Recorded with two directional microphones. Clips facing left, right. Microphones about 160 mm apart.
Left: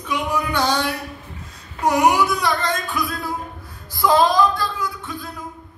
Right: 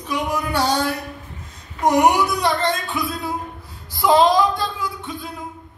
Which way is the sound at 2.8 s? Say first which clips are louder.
Even; 20° right (ahead or behind).